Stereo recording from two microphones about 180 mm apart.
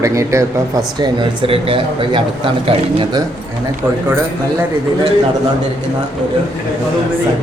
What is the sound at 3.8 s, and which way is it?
Speech, 10° right (ahead or behind).